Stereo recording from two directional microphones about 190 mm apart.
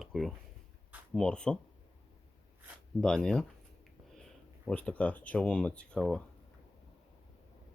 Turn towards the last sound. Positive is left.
turn(degrees=5)  # may be behind; listen again after turning